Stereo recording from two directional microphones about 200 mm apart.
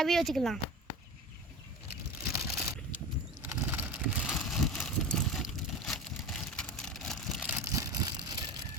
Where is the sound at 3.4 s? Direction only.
10° right (ahead or behind).